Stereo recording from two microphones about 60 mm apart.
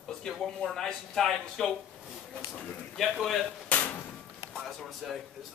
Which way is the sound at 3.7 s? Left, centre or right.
Left.